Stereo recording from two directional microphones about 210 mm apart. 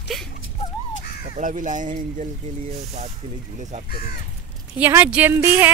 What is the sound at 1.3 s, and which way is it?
Speech, 35° right (ahead or behind).